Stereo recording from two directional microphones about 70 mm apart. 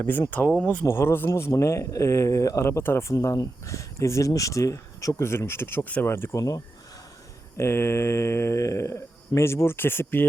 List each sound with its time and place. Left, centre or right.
0.0 s speech: left
0.9 s speech: left
1.3 s speech: left
2.6 s speech: left
5.1 s speech: left
6.3 s speech: left
7.5 s speech: left